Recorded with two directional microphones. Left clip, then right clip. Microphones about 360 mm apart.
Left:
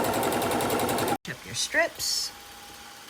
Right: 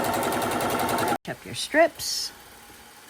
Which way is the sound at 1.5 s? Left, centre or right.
Centre.